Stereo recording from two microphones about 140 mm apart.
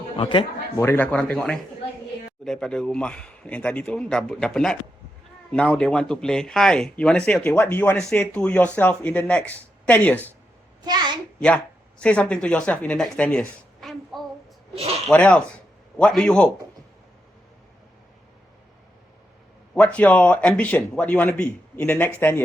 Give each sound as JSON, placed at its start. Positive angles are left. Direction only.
{"t": 0.2, "sound": "a man's voice", "side_deg": 35}
{"t": 0.8, "sound": "a man's voice", "side_deg": 15}
{"t": 10.8, "sound": "a sound", "side_deg": -30}
{"t": 11.3, "sound": "speech", "side_deg": 10}
{"t": 14.8, "sound": "speech", "side_deg": -45}
{"t": 15.0, "sound": "a man's voice", "side_deg": 10}
{"t": 19.7, "sound": "a man's voice", "side_deg": 10}